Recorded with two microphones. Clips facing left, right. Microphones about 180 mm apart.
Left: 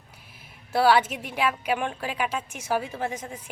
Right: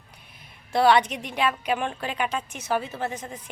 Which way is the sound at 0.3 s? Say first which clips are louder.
Right 1 dB; 5° left (ahead or behind).